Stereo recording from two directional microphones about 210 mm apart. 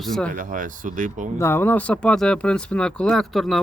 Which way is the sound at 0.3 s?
40° right (ahead or behind).